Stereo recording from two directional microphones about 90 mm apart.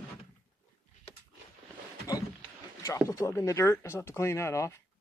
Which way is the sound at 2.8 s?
35° left (ahead or behind).